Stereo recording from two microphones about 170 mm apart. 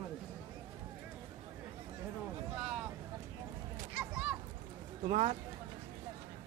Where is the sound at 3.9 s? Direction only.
5° right (ahead or behind).